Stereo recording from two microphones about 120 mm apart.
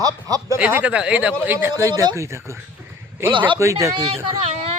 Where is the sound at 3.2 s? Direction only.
45° right (ahead or behind).